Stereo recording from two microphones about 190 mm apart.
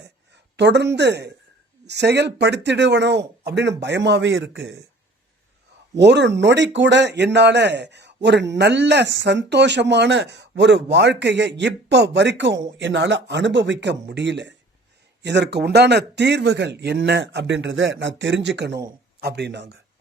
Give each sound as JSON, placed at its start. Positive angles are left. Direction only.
{"t": 0.5, "sound": "speech", "side_deg": -65}
{"t": 5.9, "sound": "speech", "side_deg": -65}